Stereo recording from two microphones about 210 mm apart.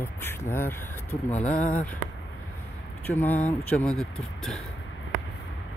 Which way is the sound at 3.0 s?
10° left (ahead or behind).